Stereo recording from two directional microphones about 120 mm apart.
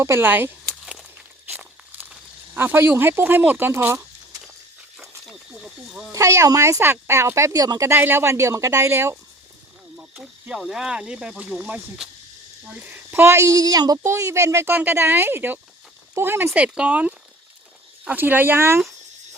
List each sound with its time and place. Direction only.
0.0 s speech: 20° right (ahead or behind)
1.5 s a sound: 15° right (ahead or behind)
2.6 s speech: 20° right (ahead or behind)
4.9 s snake: 5° right (ahead or behind)
6.1 s speech: 25° right (ahead or behind)
10.0 s speech: 10° right (ahead or behind)